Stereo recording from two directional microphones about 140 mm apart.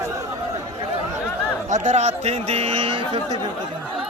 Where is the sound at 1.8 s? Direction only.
55° right (ahead or behind); by 3.2 s 40° right (ahead or behind).